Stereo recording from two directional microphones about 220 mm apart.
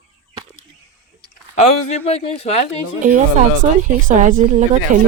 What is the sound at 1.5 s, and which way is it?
Speech, 30° left (ahead or behind).